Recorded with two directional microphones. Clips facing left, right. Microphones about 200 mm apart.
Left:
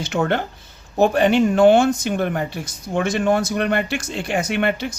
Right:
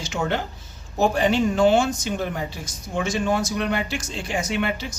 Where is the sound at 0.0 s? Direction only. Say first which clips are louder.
Left 5 dB; 60° left (ahead or behind).